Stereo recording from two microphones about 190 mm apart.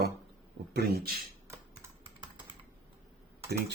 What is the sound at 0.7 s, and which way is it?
Speech, 55° right (ahead or behind).